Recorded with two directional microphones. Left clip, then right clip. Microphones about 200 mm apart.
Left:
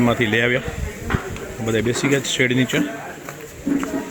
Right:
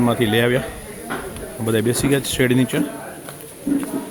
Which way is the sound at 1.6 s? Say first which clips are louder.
Right 1 dB; 15° right (ahead or behind).